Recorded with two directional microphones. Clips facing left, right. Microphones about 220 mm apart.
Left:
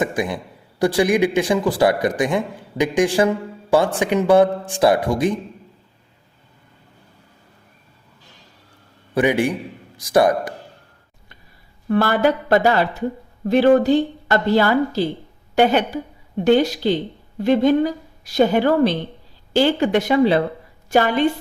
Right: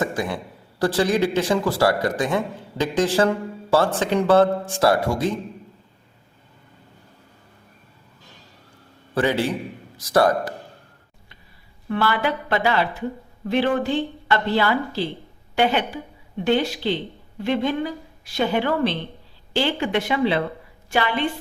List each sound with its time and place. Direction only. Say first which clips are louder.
0.0 s a man's voice: left 3 dB; 15° left (ahead or behind)
9.1 s a man's voice: left 3 dB; 15° left (ahead or behind)
11.9 s a woman's voice: left 6 dB; 45° left (ahead or behind)